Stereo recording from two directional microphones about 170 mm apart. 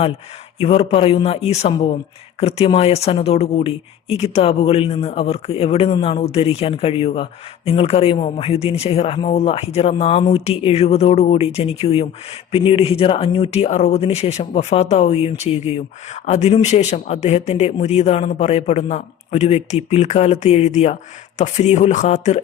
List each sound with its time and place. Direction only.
0.6 s speech: 35° left (ahead or behind)